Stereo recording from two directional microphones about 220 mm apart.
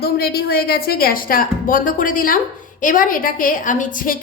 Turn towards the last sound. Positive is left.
turn(degrees=35)  # may be behind; listen again after turning